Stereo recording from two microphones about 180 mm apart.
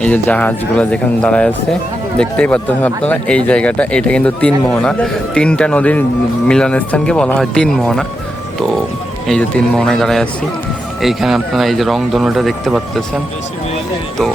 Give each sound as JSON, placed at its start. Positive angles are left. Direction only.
{"t": 0.0, "sound": "a man's voice", "side_deg": 10}
{"t": 9.2, "sound": "speech", "side_deg": 5}